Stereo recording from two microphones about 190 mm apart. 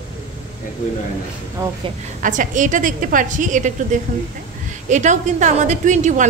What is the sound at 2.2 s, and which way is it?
A woman's voice, 45° right (ahead or behind).